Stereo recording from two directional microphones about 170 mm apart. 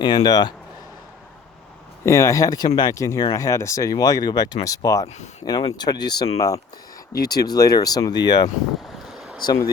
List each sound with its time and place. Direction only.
0.0 s speech: 25° left (ahead or behind)
2.0 s speech: 15° left (ahead or behind)
9.0 s a sound: 5° right (ahead or behind)
9.4 s speech: 25° left (ahead or behind)